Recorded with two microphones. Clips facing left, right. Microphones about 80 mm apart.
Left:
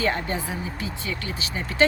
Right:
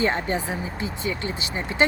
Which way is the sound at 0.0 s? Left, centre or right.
Right.